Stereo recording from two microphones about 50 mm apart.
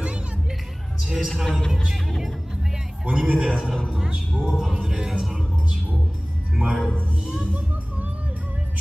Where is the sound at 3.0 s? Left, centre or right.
Right; by 5.4 s centre.